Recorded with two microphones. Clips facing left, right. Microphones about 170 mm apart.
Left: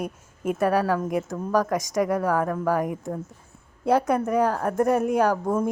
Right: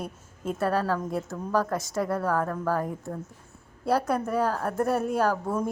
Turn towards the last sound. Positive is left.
turn(degrees=15)  # may be behind; listen again after turning